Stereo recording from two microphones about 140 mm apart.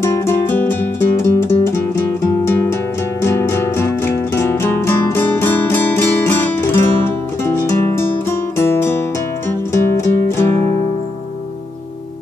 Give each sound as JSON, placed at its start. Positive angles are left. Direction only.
{"t": 0.0, "sound": "music", "side_deg": 15}